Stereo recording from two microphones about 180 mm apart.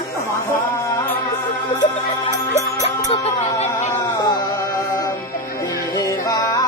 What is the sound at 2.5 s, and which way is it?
Music, 40° left (ahead or behind).